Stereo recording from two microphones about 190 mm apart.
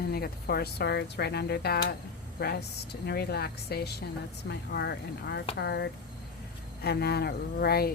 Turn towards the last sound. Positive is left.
turn(degrees=55)  # may be behind; listen again after turning